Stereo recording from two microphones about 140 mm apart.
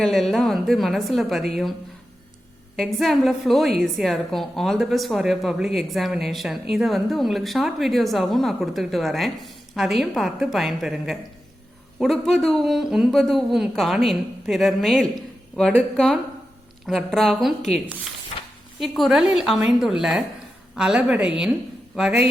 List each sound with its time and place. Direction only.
0.0 s a woman's voice: 5° left (ahead or behind)
2.7 s a woman's voice: centre (ahead or behind)
18.3 s a sound: 50° left (ahead or behind)
18.8 s a woman's voice: centre (ahead or behind)